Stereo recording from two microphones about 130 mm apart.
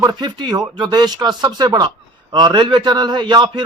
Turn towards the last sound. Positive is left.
turn(degrees=-35)  # may be behind; listen again after turning